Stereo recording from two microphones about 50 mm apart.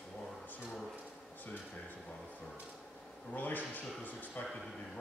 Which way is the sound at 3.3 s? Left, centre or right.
Left.